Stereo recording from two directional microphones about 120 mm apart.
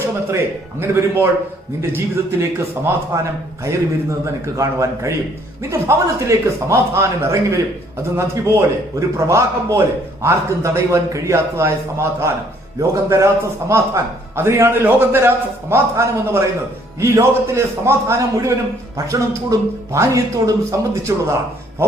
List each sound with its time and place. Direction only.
0.0 s a man's voice: 20° right (ahead or behind)
4.5 s a man's voice: 25° right (ahead or behind)